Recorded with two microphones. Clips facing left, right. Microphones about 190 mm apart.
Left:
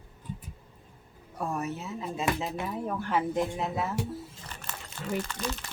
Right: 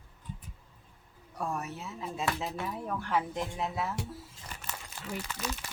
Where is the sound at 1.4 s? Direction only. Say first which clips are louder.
Left 3 dB; centre (ahead or behind).